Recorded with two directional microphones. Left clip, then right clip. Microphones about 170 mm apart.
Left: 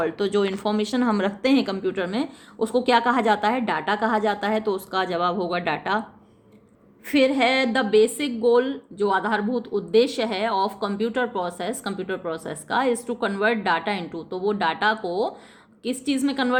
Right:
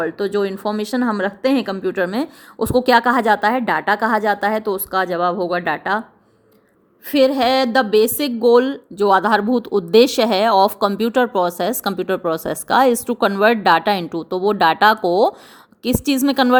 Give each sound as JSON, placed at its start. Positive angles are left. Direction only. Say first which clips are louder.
{"t": 0.0, "sound": "speech", "louder": "right 3 dB", "side_deg": -25}
{"t": 7.1, "sound": "a woman's voice", "louder": "right 5 dB", "side_deg": -35}